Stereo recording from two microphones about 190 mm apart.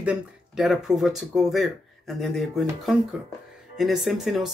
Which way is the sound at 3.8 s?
Centre (ahead or behind).